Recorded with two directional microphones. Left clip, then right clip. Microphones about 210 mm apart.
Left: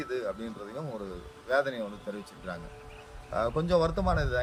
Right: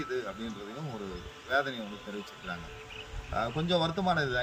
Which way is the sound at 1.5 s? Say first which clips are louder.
Left 2 dB; 25° left (ahead or behind).